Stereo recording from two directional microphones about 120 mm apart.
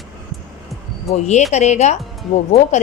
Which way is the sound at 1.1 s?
70° left (ahead or behind).